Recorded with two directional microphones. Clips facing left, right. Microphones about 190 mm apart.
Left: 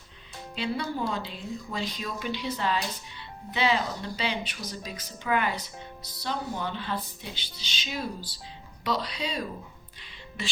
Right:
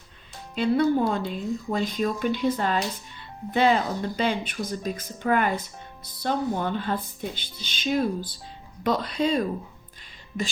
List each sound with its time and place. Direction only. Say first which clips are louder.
0.5 s speech: right 10 dB; 50° right (ahead or behind)